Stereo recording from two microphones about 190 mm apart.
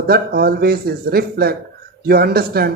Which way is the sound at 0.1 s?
55° right (ahead or behind).